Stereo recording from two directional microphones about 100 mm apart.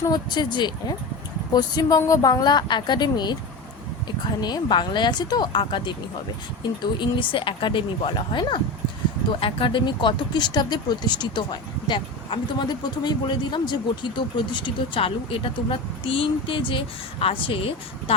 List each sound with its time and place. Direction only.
0.0 s speech: 45° left (ahead or behind)
4.4 s speech: 45° left (ahead or behind); by 17.7 s 65° left (ahead or behind)